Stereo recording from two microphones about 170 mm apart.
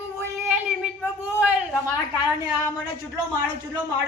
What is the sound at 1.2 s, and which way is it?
Speech, 10° right (ahead or behind).